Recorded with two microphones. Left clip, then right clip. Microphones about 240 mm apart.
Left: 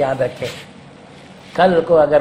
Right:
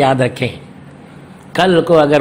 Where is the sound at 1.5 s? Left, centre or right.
Right.